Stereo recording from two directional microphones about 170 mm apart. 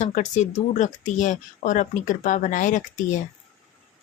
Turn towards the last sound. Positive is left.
turn(degrees=50)  # may be behind; listen again after turning